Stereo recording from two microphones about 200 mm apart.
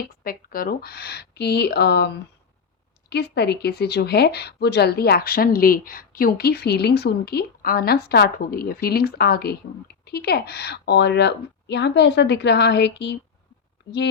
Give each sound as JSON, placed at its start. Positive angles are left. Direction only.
{"t": 0.3, "sound": "a woman's voice", "side_deg": 45}